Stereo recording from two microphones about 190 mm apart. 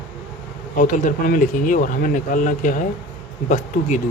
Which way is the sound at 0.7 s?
45° left (ahead or behind).